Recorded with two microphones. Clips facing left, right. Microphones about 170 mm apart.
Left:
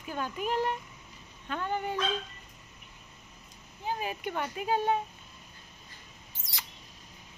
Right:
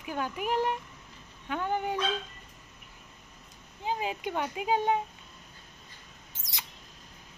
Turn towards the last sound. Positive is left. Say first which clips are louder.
# right 1 dB
turn(degrees=-20)  # may be behind; listen again after turning